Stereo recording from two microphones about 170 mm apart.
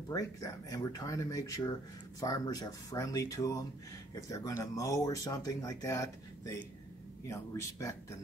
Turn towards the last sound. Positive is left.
turn(degrees=15)  # may be behind; listen again after turning